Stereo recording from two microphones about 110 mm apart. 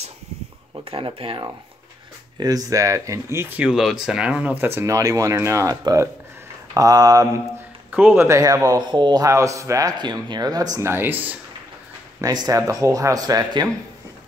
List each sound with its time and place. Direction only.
0.8 s speech: 55° right (ahead or behind)
2.3 s speech: 35° right (ahead or behind)
3.6 s a man's voice: 5° right (ahead or behind); by 7.4 s 35° right (ahead or behind)
7.9 s a man's voice: 15° right (ahead or behind); by 10.8 s 35° right (ahead or behind)
10.8 s speech: 20° right (ahead or behind)
12.2 s a man's voice: 35° right (ahead or behind)